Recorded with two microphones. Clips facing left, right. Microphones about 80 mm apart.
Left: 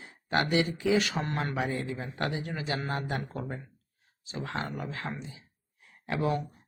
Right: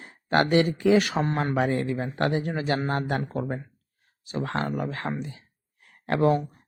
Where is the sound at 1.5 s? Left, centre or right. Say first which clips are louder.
Right 7 dB; right.